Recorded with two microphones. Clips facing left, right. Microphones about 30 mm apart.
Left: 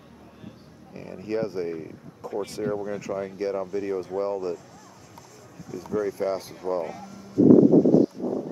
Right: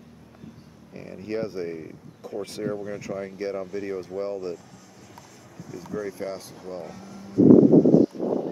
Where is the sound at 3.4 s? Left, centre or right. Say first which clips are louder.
Left 3 dB; centre.